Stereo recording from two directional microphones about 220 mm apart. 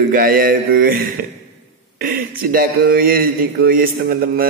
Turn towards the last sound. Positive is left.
turn(degrees=-40)  # may be behind; listen again after turning